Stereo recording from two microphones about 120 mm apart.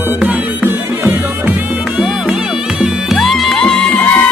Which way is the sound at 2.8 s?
Centre (ahead or behind).